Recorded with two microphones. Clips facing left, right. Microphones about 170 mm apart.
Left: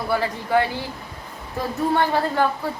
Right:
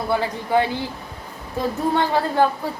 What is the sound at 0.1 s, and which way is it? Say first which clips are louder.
Speech: even; 20° right (ahead or behind).